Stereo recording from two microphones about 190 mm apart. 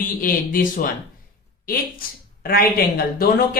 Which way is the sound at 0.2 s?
50° left (ahead or behind).